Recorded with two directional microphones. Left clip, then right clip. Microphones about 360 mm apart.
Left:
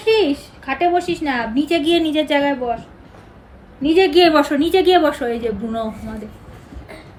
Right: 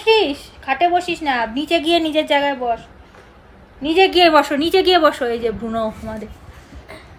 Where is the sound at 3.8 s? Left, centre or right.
Centre.